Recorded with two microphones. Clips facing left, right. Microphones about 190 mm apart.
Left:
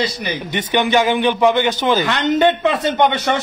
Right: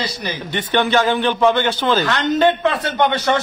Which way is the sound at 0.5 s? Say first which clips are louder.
Left 1 dB; 15° left (ahead or behind).